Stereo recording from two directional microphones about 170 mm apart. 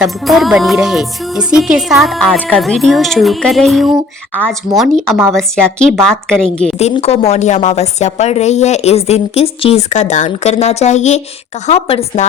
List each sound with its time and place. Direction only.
0.0 s speech: centre (ahead or behind)
6.7 s a woman's voice: 35° left (ahead or behind)